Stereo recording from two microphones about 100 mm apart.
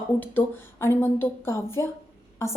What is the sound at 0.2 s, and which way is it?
A woman's voice, 20° left (ahead or behind).